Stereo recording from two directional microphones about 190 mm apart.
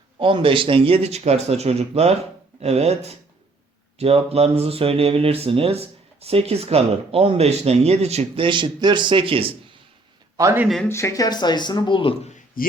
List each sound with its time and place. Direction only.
0.2 s speech: 25° right (ahead or behind)
10.3 s a man's voice: 15° right (ahead or behind)
10.8 s speech: 15° left (ahead or behind)
12.6 s speech: 50° left (ahead or behind)